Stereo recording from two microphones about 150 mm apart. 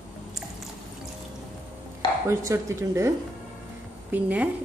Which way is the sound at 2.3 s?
20° right (ahead or behind).